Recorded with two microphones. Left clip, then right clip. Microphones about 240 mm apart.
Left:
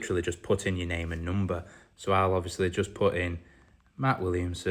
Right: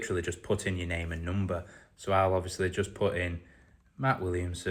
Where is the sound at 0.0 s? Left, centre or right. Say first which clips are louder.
Left 3 dB; left.